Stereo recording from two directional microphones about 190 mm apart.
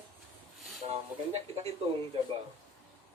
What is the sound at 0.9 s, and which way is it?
Speech, 35° right (ahead or behind).